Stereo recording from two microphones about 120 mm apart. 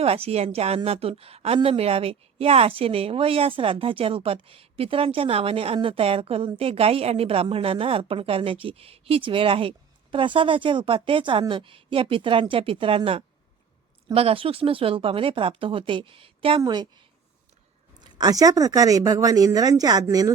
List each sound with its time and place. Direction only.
0.0 s a woman's voice: 60° right (ahead or behind)
14.1 s speech: 50° right (ahead or behind)
18.0 s speech: 35° right (ahead or behind)